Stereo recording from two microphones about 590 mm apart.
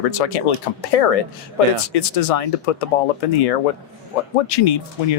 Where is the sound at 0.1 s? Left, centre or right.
Left.